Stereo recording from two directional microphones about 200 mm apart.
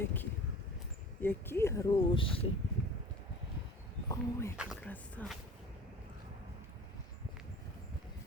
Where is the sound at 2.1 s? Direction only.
25° left (ahead or behind).